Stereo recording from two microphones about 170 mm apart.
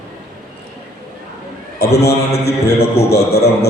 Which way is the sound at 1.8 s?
70° left (ahead or behind).